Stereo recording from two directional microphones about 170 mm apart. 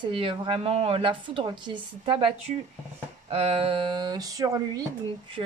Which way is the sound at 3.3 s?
40° right (ahead or behind).